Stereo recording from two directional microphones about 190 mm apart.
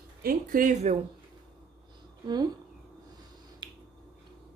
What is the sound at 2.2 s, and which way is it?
Speech, 20° right (ahead or behind).